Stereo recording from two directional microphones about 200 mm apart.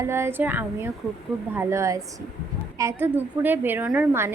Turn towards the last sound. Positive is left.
turn(degrees=-10)  # may be behind; listen again after turning